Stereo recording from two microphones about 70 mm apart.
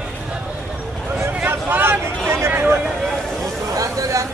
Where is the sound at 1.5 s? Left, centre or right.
Right.